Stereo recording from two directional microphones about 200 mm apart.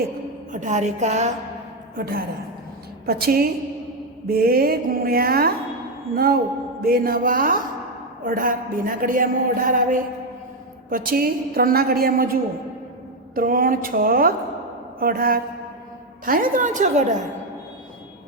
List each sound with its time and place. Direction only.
0.5 s a woman's voice: 40° right (ahead or behind)
2.0 s a woman's voice: 45° right (ahead or behind)